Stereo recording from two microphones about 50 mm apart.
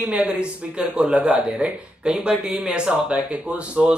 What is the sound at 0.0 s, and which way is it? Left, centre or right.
Speech, right.